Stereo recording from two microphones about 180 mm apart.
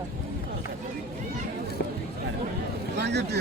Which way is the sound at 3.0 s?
70° right (ahead or behind).